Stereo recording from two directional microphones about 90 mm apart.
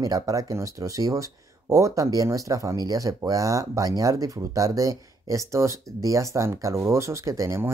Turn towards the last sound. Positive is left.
turn(degrees=-35)  # may be behind; listen again after turning